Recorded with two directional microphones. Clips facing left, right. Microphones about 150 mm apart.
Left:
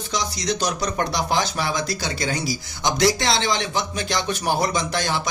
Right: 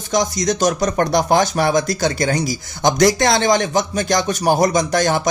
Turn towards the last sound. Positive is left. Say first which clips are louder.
# right 7 dB
turn(degrees=-45)  # may be behind; listen again after turning